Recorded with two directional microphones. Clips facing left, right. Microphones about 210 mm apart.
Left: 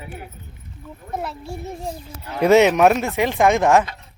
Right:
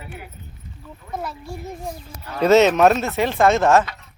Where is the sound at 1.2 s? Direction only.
25° left (ahead or behind).